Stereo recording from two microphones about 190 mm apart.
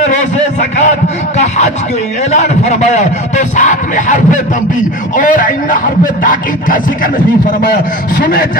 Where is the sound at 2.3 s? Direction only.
35° left (ahead or behind).